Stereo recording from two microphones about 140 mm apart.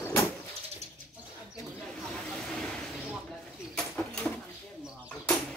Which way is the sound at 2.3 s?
5° left (ahead or behind).